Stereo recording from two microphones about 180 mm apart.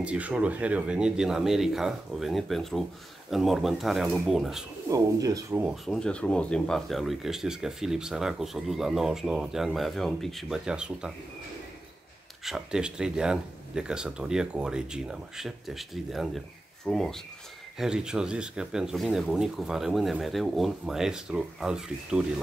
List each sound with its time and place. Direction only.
0.0 s speech: 5° right (ahead or behind)
4.8 s speech: 20° right (ahead or behind)
5.7 s speech: centre (ahead or behind)
12.4 s speech: 5° right (ahead or behind)